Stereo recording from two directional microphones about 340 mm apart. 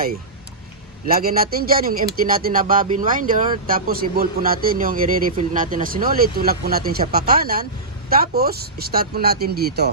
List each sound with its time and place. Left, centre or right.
1.0 s a man's voice: right